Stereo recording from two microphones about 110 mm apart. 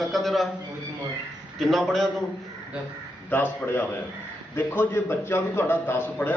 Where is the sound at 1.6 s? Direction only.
Centre (ahead or behind).